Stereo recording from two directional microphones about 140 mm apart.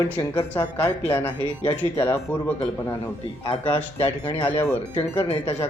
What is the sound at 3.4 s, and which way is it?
Speech, 40° left (ahead or behind).